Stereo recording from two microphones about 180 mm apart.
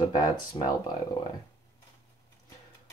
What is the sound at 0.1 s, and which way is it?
Speech, 20° left (ahead or behind).